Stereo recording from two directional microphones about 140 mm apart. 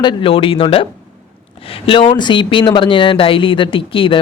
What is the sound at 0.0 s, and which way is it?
Speech, 35° left (ahead or behind).